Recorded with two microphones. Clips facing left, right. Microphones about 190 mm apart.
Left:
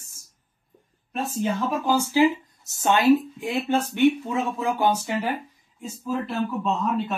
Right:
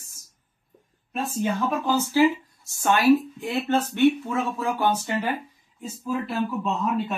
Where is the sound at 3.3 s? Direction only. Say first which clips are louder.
Even; 10° left (ahead or behind).